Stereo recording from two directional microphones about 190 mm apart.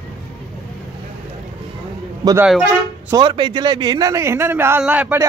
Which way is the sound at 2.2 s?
20° right (ahead or behind).